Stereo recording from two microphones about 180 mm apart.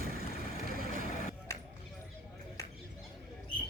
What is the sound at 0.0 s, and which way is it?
Vehicle, 55° right (ahead or behind).